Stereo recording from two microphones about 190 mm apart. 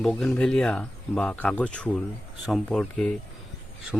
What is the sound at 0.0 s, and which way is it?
Speech, 5° left (ahead or behind).